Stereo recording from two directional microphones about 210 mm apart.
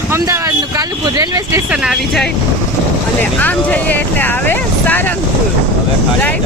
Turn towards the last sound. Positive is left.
turn(degrees=10)  # may be behind; listen again after turning